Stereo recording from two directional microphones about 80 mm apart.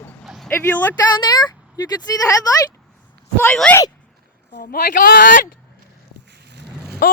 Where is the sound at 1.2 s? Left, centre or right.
Left.